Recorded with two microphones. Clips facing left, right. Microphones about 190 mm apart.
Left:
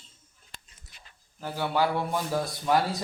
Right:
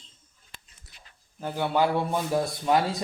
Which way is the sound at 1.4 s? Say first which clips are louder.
Right 2 dB; 20° right (ahead or behind).